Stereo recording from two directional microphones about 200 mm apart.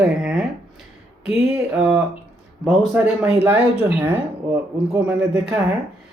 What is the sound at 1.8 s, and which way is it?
Speech, 5° right (ahead or behind).